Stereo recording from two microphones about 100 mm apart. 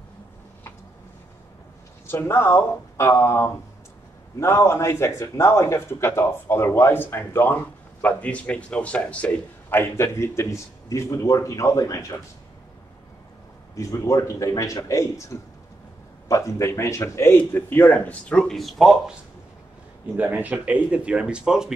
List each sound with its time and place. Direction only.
2.0 s speech: 25° left (ahead or behind)
13.7 s a man's voice: 35° left (ahead or behind); by 19.1 s centre (ahead or behind)
20.2 s speech: 15° right (ahead or behind)